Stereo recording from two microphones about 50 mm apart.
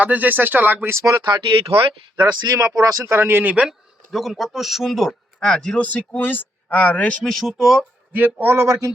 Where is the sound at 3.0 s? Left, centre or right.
Right.